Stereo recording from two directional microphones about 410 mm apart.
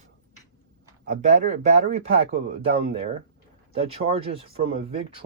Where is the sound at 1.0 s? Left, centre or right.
Centre.